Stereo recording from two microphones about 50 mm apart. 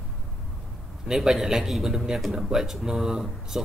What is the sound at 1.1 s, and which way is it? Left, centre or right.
Speech, centre.